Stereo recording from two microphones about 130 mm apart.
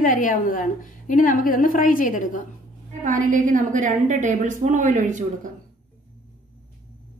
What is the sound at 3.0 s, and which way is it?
A woman's voice, 85° right.